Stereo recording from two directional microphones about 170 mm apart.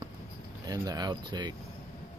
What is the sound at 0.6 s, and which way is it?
Speech, 20° right (ahead or behind).